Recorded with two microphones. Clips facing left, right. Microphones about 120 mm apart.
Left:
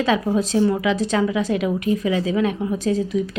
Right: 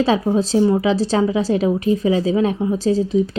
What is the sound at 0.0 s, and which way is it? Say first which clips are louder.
A woman's voice: right 3 dB; 30° right (ahead or behind).